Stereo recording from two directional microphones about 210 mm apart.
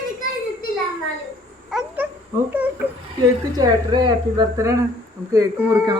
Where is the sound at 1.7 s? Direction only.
Centre (ahead or behind).